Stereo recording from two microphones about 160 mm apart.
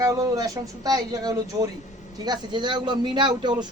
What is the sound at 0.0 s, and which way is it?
Speech, 20° right (ahead or behind).